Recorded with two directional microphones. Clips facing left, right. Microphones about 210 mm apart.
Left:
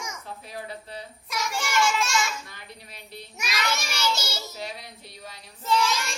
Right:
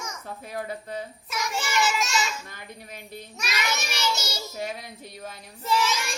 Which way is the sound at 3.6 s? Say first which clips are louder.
Left 1 dB; 15° right (ahead or behind).